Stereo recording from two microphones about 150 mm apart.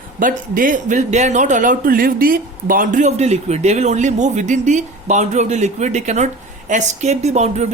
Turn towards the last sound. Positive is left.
turn(degrees=-45)  # may be behind; listen again after turning